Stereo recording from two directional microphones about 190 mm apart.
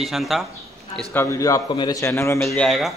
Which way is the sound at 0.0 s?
Centre (ahead or behind).